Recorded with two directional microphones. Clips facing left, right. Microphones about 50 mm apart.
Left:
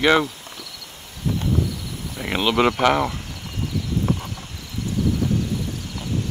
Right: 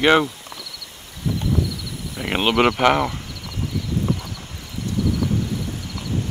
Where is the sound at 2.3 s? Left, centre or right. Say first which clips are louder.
Right 1 dB; right.